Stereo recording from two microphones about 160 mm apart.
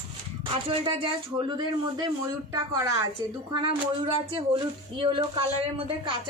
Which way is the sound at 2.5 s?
20° right (ahead or behind).